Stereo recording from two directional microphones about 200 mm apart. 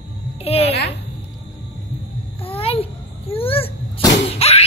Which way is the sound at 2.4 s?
30° left (ahead or behind).